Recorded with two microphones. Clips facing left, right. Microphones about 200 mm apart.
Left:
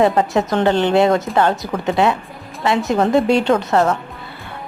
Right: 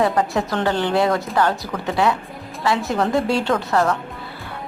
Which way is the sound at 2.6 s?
20° left (ahead or behind).